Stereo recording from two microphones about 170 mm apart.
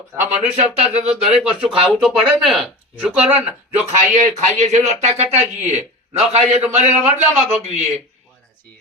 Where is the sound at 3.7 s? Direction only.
40° right (ahead or behind).